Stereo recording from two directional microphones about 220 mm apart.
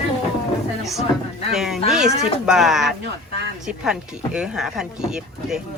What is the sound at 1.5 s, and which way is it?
Speech, centre (ahead or behind).